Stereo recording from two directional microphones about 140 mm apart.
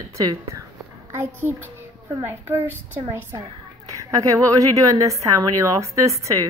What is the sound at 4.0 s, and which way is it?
A woman's voice, 25° right (ahead or behind).